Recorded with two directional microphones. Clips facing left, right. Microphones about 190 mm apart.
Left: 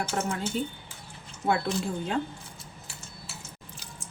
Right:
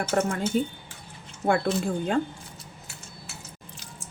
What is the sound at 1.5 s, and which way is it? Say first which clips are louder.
Speech: right 3 dB; 50° right (ahead or behind).